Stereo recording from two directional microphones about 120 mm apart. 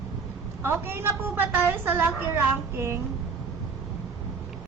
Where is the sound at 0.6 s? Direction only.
20° right (ahead or behind).